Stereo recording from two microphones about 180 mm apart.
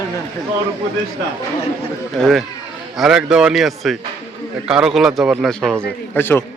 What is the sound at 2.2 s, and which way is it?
A man's voice, centre (ahead or behind).